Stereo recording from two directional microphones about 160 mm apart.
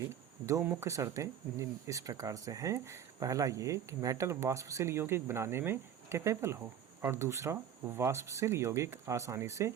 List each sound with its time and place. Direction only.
0.0 s speech: 20° right (ahead or behind)